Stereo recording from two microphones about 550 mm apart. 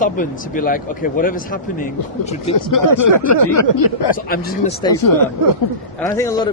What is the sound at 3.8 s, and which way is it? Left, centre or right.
Speech, left.